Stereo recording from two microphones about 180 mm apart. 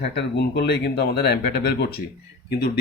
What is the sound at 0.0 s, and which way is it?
Speech, 70° left (ahead or behind).